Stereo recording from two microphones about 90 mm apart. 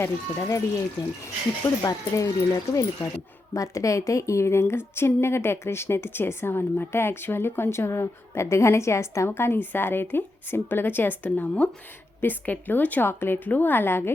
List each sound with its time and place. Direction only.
0.0 s speech: 35° left (ahead or behind)
1.6 s speech: 40° left (ahead or behind)
3.5 s a woman's voice: 35° left (ahead or behind)